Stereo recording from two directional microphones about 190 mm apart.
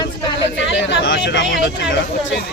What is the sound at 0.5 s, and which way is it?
Speech, 70° left (ahead or behind).